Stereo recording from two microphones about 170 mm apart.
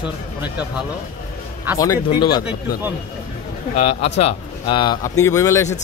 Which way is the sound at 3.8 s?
40° left (ahead or behind).